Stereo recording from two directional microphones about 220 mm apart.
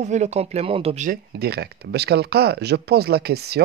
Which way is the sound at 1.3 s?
45° right (ahead or behind).